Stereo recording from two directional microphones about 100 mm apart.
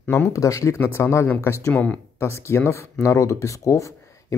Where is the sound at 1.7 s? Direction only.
15° left (ahead or behind).